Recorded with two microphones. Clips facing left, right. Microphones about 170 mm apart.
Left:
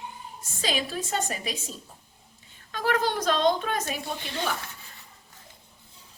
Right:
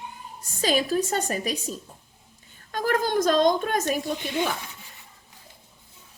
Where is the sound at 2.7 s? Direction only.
45° right (ahead or behind).